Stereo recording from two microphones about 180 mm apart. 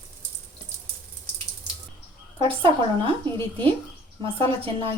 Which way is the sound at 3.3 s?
30° right (ahead or behind).